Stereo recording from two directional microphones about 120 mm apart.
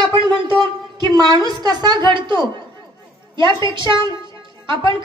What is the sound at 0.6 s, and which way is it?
A woman's voice, 40° right (ahead or behind).